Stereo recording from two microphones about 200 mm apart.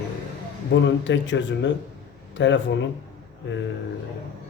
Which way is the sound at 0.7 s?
65° left (ahead or behind).